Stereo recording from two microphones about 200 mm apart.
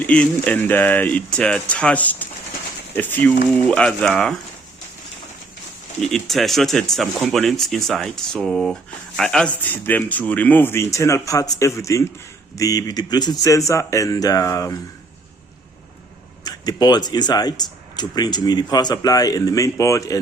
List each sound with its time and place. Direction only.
0.0 s speech: 5° left (ahead or behind)
6.0 s speech: centre (ahead or behind)
16.4 s speech: 20° left (ahead or behind)